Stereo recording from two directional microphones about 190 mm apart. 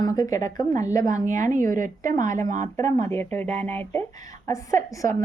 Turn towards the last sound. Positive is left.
turn(degrees=15)  # may be behind; listen again after turning